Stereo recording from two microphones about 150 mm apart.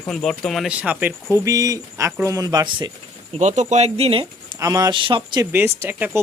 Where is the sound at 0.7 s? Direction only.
10° right (ahead or behind).